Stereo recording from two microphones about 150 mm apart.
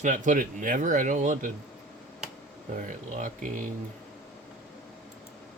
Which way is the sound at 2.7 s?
60° right (ahead or behind).